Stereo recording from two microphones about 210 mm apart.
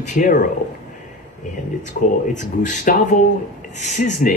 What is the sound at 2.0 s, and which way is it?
Speech, 40° left (ahead or behind).